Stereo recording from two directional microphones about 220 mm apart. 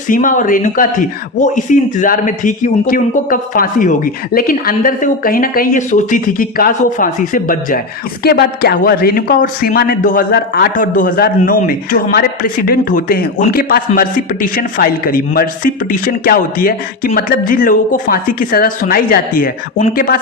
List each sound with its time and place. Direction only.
0.1 s speech: 35° left (ahead or behind)